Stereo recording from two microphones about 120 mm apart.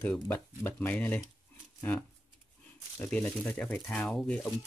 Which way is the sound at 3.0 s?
10° left (ahead or behind).